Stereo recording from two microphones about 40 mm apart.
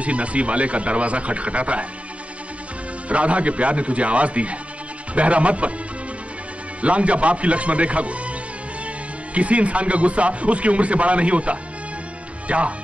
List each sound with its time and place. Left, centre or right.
0.0 s a man's voice: right
3.1 s a man's voice: right
6.8 s a man's voice: right